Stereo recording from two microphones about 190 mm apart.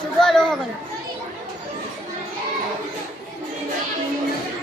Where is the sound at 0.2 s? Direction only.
5° left (ahead or behind).